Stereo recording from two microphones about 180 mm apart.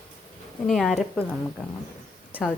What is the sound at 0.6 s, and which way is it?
A woman's voice, centre (ahead or behind).